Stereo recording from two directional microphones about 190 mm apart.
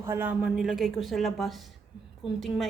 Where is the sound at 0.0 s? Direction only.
10° right (ahead or behind).